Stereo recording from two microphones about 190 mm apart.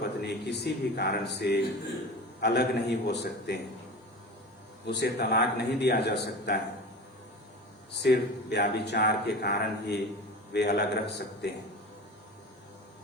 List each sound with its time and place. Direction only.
0.0 s speech: 60° left (ahead or behind)
4.9 s speech: 60° left (ahead or behind)
8.0 s speech: 60° left (ahead or behind)